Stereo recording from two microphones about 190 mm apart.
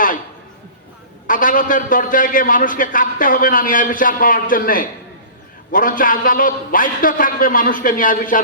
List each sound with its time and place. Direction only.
1.3 s a man's voice: 45° left (ahead or behind)